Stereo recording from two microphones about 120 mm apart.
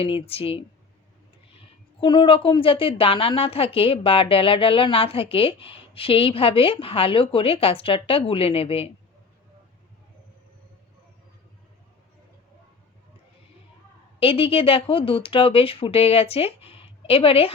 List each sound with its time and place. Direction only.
0.0 s a woman's voice: 50° left (ahead or behind)
2.0 s a woman's voice: 45° left (ahead or behind)
14.2 s a woman's voice: 50° left (ahead or behind)